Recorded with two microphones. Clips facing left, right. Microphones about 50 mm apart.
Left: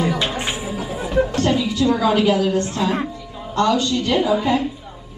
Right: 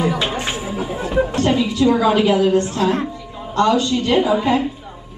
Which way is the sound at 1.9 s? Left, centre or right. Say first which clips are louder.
Right 2 dB; right.